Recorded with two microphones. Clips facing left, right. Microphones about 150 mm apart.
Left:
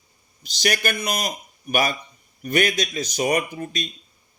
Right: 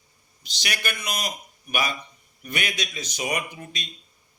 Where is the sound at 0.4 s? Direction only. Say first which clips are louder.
Left 8 dB; 45° left (ahead or behind).